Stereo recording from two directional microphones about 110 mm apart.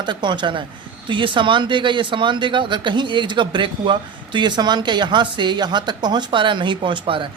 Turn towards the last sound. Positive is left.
turn(degrees=-50)  # may be behind; listen again after turning